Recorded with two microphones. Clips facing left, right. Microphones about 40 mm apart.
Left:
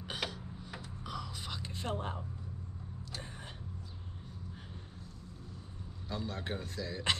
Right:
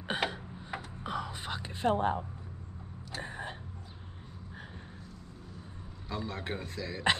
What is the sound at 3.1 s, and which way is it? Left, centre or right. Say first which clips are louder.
Vehicle: right 9 dB; right.